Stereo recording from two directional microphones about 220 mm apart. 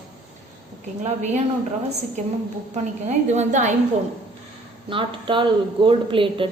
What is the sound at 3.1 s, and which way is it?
Speech, 30° right (ahead or behind).